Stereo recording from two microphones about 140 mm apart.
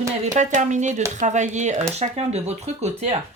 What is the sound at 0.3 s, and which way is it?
Speech, 60° right (ahead or behind).